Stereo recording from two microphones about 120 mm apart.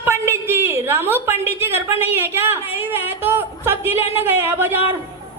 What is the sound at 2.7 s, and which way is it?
A woman's voice, 20° right (ahead or behind).